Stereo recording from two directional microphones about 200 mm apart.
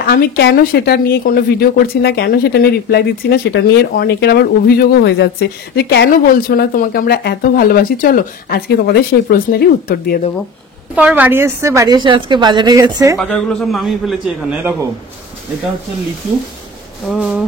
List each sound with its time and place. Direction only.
0.0 s speech: 50° left (ahead or behind)
11.0 s a woman's voice: 10° right (ahead or behind)
13.2 s a man's voice: 5° left (ahead or behind)